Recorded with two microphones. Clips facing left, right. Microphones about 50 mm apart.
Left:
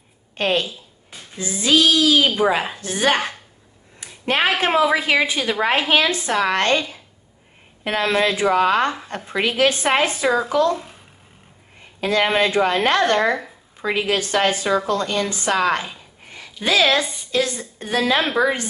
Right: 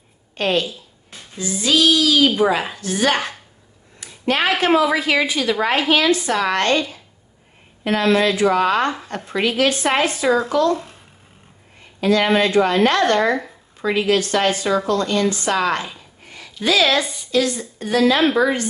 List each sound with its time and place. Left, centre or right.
0.4 s a woman's voice: left
4.0 s a sound: left
4.5 s a woman's voice: centre
12.0 s a woman's voice: centre
16.6 s a woman's voice: left